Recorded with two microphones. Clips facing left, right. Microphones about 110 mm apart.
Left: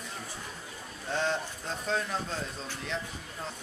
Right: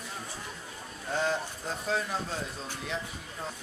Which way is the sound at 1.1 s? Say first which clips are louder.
Right 1 dB; 5° right (ahead or behind).